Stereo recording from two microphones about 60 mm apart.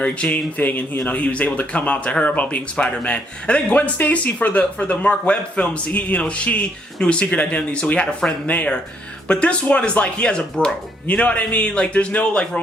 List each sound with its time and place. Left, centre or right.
0.0 s a man's voice: centre